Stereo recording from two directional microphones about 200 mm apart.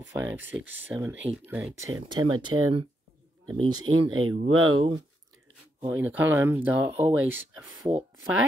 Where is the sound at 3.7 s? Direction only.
90° right.